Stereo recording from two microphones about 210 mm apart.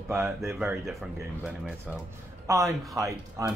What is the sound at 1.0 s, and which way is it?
Speech, 10° right (ahead or behind).